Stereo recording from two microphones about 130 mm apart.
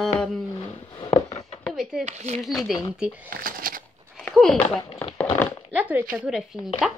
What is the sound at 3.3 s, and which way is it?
Speech, 90° right.